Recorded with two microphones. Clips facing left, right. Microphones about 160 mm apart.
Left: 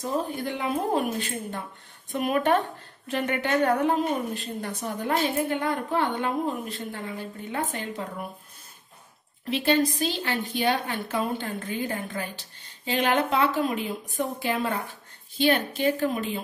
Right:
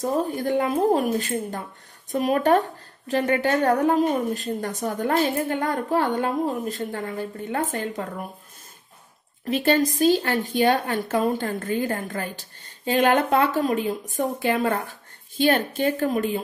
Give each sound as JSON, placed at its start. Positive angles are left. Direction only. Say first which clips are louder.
{"t": 0.0, "sound": "a woman's voice", "louder": "right 5 dB", "side_deg": -45}
{"t": 9.5, "sound": "a woman's voice", "louder": "right 3 dB", "side_deg": -45}